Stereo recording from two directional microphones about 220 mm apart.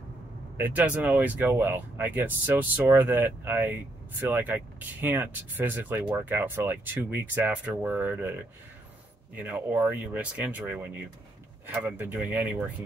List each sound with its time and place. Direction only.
0.6 s speech: 5° right (ahead or behind)
9.4 s speech: 5° right (ahead or behind)